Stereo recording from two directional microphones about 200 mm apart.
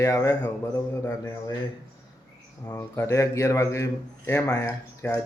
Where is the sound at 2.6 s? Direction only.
10° left (ahead or behind).